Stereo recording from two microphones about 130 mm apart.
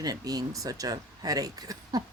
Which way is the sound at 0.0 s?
30° right (ahead or behind).